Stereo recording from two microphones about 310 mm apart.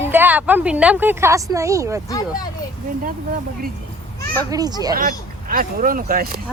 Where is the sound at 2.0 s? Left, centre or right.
Centre.